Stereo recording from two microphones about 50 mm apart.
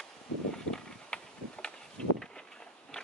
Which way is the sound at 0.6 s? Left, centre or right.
Centre.